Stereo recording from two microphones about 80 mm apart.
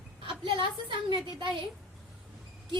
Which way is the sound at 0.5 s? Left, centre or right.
Right.